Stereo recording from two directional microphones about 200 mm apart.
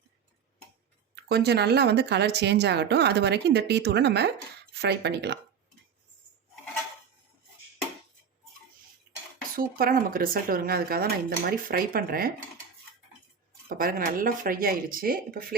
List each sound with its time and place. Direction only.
1.1 s speech: 55° right (ahead or behind)
9.6 s speech: 45° right (ahead or behind)
13.7 s speech: 45° right (ahead or behind)